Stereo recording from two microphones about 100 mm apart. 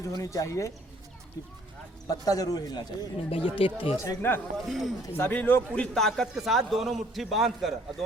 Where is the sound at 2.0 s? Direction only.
40° left (ahead or behind).